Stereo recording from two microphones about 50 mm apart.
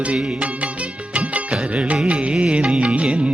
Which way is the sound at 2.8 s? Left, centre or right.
Right.